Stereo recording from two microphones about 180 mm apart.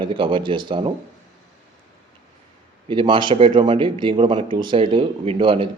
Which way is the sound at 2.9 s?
25° right (ahead or behind).